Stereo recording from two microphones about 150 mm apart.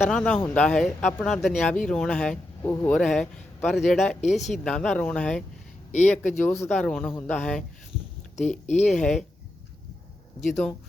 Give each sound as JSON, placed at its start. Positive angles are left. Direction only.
{"t": 0.4, "sound": "speech", "side_deg": 5}
{"t": 5.9, "sound": "speech", "side_deg": 55}
{"t": 6.7, "sound": "speech", "side_deg": 5}
{"t": 8.4, "sound": "speech", "side_deg": 50}
{"t": 8.9, "sound": "speech", "side_deg": 0}
{"t": 10.4, "sound": "speech", "side_deg": 0}